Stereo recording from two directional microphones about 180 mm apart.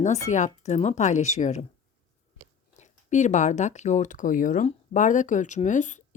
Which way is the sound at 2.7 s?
40° left (ahead or behind).